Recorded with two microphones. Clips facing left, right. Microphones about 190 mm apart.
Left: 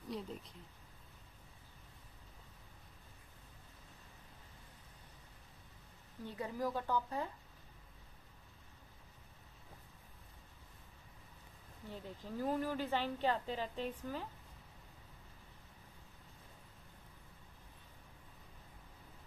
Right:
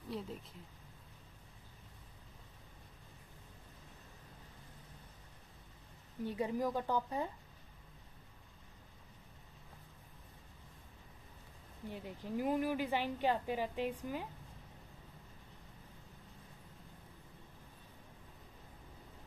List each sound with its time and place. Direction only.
0.1 s speech: centre (ahead or behind)
6.2 s a woman's voice: 20° right (ahead or behind)
11.9 s a woman's voice: 15° right (ahead or behind)